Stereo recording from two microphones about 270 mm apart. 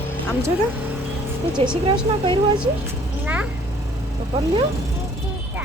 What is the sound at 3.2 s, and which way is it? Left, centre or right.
Speech, centre.